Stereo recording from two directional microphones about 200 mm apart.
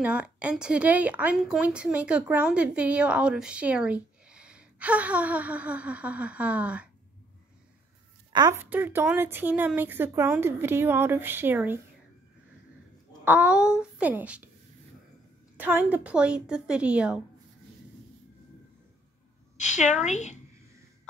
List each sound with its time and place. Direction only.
0.0 s speech: 5° right (ahead or behind)
8.3 s speech: 20° right (ahead or behind)
13.2 s speech: 5° right (ahead or behind)
15.5 s a woman's voice: 10° right (ahead or behind)
19.5 s a woman's voice: 35° left (ahead or behind)